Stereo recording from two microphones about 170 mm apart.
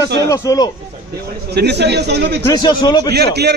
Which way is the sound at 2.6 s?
25° left (ahead or behind).